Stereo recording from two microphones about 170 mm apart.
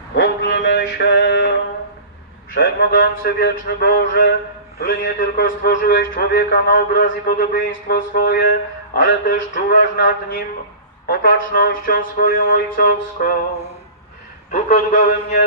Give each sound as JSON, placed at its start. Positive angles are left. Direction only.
{"t": 0.1, "sound": "mantra", "side_deg": 90}
{"t": 2.6, "sound": "a man's voice", "side_deg": 60}
{"t": 7.5, "sound": "speech", "side_deg": 90}
{"t": 7.9, "sound": "a man's voice", "side_deg": 55}
{"t": 14.5, "sound": "a man's voice", "side_deg": 45}